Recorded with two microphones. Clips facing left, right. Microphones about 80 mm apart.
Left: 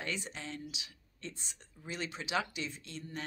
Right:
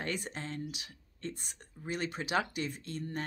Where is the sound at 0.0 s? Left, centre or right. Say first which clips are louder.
Right 3 dB; right.